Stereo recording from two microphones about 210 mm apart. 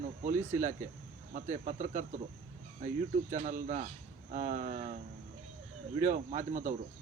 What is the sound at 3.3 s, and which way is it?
Speech, 35° right (ahead or behind).